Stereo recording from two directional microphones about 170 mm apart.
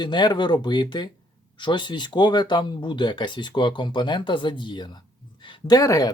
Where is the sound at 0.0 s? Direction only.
25° left (ahead or behind).